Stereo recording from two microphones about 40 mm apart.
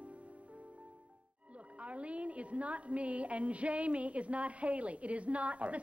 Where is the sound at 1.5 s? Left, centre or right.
Right.